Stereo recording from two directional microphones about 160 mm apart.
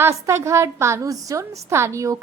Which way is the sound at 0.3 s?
20° right (ahead or behind).